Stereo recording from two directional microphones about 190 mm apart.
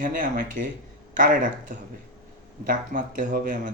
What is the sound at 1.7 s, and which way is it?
Speech, 40° right (ahead or behind).